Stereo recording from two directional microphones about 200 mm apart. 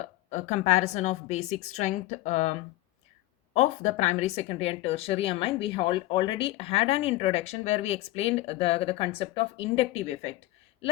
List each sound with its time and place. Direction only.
0.3 s a woman's voice: 35° left (ahead or behind)
3.5 s speech: 35° left (ahead or behind)